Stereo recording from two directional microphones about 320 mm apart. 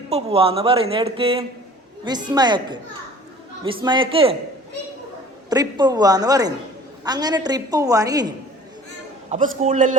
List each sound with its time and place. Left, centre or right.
0.1 s speech: centre
5.5 s speech: centre
9.3 s a man's voice: right